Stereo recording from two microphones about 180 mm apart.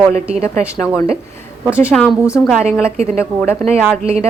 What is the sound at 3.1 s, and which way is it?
Speech, 10° left (ahead or behind).